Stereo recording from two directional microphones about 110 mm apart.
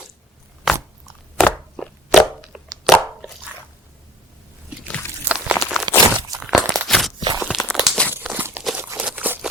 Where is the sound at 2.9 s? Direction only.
5° right (ahead or behind).